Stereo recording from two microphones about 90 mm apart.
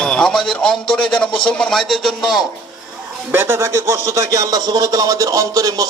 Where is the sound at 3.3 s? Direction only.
25° right (ahead or behind).